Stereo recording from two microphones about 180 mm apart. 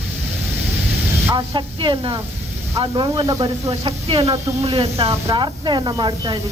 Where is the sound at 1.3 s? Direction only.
25° right (ahead or behind).